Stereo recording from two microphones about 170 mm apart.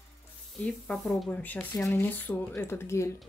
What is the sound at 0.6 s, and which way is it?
Speech, 5° left (ahead or behind).